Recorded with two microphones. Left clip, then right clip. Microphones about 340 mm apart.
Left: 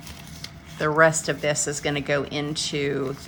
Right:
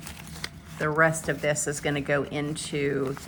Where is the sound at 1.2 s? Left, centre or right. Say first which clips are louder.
Left 2 dB; centre.